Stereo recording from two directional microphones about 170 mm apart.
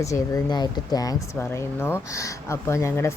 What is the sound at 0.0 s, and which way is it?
Speech, 20° left (ahead or behind).